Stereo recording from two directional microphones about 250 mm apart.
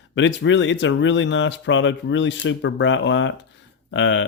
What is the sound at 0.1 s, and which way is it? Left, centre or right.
Speech, left.